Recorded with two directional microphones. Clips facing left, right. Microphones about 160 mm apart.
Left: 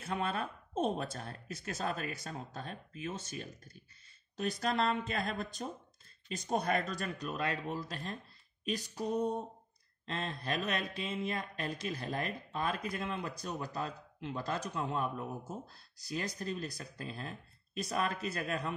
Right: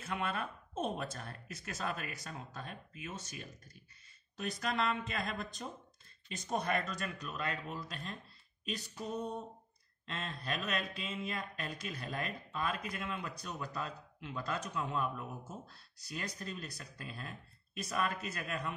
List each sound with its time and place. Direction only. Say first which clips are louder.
0.0 s speech: left 2 dB; 35° left (ahead or behind)